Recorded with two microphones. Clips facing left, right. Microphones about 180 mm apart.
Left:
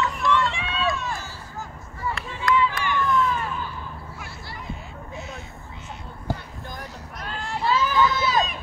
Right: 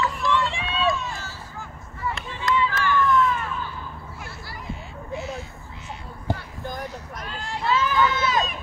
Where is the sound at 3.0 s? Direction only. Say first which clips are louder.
Right 1 dB; centre (ahead or behind).